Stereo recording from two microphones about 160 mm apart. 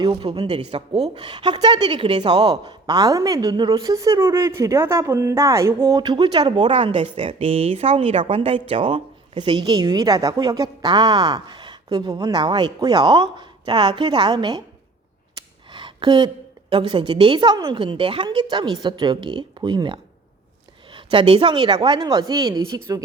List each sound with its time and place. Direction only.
0.0 s a woman's voice: 35° right (ahead or behind)